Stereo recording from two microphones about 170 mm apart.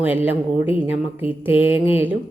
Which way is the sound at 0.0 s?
10° right (ahead or behind).